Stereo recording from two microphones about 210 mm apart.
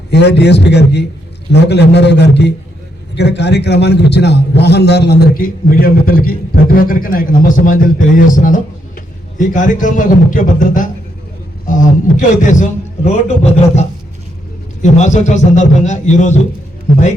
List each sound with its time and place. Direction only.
0.1 s a man's voice: 50° left (ahead or behind); by 16.5 s 35° left (ahead or behind)